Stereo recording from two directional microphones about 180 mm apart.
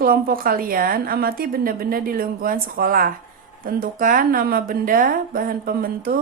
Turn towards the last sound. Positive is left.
turn(degrees=-55)  # may be behind; listen again after turning